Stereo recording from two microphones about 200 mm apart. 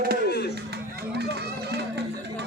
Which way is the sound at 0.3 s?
55° left (ahead or behind).